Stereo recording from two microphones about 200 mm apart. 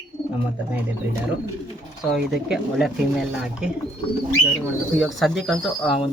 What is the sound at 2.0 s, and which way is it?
Speech, centre (ahead or behind).